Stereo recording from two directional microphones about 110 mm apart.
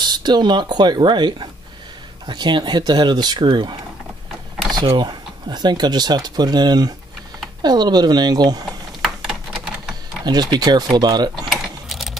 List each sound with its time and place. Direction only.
0.0 s speech: 40° right (ahead or behind)
4.8 s speech: 45° right (ahead or behind)
9.0 s typing: 5° right (ahead or behind)
10.2 s speech: 40° right (ahead or behind)
11.4 s mechanisms: centre (ahead or behind)